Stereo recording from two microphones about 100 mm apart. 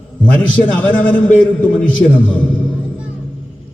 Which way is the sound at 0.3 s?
15° left (ahead or behind).